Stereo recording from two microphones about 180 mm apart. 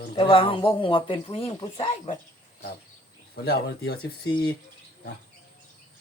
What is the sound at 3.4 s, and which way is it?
Speech, 65° left (ahead or behind).